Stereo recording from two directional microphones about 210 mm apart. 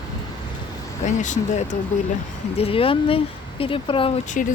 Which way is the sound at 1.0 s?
35° left (ahead or behind).